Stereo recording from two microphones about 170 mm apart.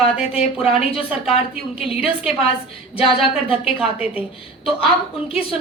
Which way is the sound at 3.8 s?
10° right (ahead or behind).